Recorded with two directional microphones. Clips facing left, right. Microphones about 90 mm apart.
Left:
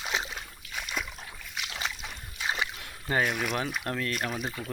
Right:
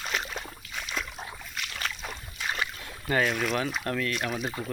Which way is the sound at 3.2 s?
5° left (ahead or behind).